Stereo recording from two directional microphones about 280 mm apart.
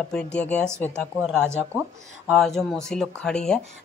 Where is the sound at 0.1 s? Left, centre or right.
Centre.